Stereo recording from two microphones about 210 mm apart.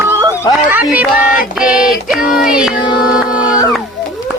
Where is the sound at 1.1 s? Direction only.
40° left (ahead or behind).